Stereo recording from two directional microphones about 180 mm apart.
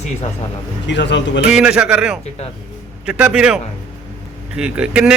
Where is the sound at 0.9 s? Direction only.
75° left (ahead or behind).